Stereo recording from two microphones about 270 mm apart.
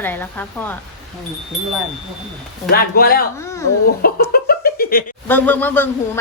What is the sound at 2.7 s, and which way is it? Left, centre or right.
Speech, left.